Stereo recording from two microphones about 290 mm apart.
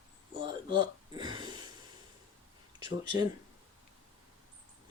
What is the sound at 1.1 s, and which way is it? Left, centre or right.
Speech, centre.